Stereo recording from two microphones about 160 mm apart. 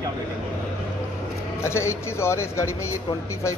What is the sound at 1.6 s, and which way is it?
A man's voice, 15° left (ahead or behind).